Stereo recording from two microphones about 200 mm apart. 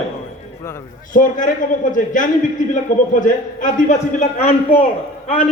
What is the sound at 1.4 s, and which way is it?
A man's voice, 40° left (ahead or behind).